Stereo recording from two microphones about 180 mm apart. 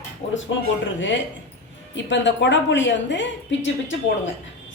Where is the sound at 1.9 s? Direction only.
90° left.